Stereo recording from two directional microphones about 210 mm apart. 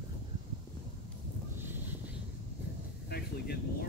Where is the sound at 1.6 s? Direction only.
10° right (ahead or behind).